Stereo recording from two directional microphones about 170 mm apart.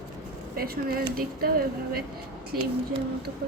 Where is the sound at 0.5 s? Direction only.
60° right (ahead or behind).